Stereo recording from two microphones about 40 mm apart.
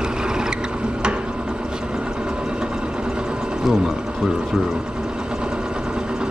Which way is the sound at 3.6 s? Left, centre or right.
Centre.